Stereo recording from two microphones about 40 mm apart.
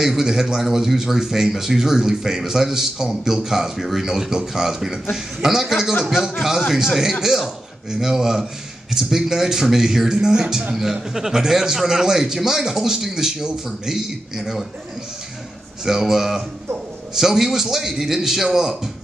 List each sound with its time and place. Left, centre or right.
0.0 s a man's voice: centre
15.8 s a man's voice: centre